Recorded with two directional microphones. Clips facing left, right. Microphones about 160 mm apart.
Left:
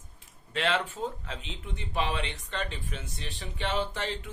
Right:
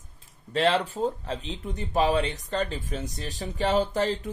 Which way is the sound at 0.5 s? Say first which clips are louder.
Right 6 dB; 35° right (ahead or behind).